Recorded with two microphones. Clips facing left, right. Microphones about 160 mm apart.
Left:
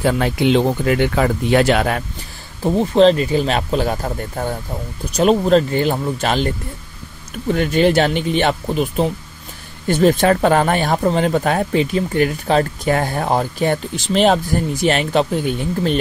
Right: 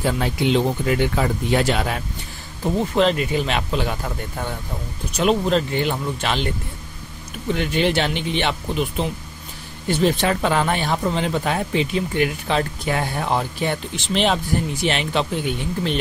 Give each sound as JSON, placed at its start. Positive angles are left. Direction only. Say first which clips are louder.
{"t": 0.0, "sound": "speech", "louder": "left 5 dB", "side_deg": 60}
{"t": 2.6, "sound": "speech", "louder": "left 6 dB", "side_deg": 30}
{"t": 7.5, "sound": "speech", "louder": "left 6 dB", "side_deg": 45}